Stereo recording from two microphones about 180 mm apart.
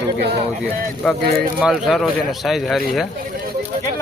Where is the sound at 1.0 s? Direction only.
5° left (ahead or behind).